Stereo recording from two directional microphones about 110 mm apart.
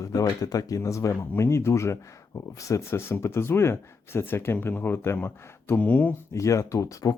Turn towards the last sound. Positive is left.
turn(degrees=30)  # may be behind; listen again after turning